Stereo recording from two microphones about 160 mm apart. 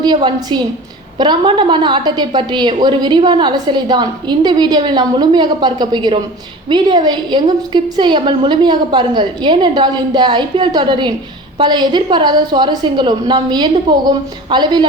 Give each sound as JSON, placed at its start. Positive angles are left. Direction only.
{"t": 0.0, "sound": "a woman's voice", "side_deg": -25}